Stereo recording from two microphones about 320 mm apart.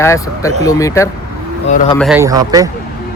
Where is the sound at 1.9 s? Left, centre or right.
Centre.